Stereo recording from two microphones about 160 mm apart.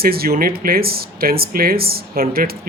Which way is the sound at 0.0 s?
70° right (ahead or behind).